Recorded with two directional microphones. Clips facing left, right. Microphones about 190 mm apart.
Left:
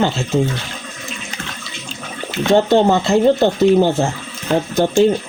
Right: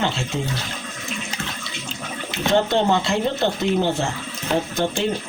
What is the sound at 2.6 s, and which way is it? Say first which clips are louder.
Speech: left 6 dB; 40° left (ahead or behind).